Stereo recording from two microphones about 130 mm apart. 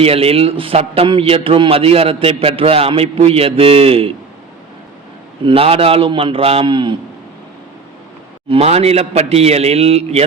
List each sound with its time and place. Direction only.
0.0 s a man's voice: 50° right (ahead or behind)
5.5 s a man's voice: 45° right (ahead or behind)
8.4 s a man's voice: 50° right (ahead or behind)